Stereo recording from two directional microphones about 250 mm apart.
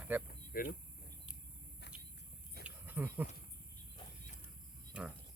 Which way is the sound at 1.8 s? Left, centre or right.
Left.